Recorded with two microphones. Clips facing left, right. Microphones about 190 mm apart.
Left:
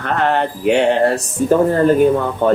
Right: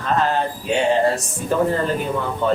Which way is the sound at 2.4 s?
50° left (ahead or behind).